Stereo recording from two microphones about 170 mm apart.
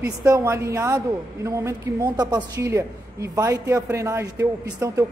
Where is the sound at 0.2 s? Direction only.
15° right (ahead or behind).